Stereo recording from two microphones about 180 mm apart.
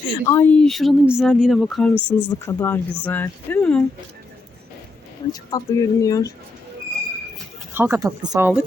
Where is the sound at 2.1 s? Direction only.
10° left (ahead or behind).